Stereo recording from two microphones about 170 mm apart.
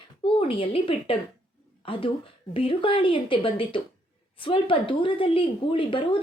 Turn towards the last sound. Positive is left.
turn(degrees=30)  # may be behind; listen again after turning